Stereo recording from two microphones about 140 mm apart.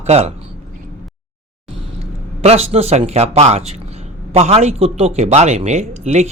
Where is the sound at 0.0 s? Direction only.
50° right (ahead or behind).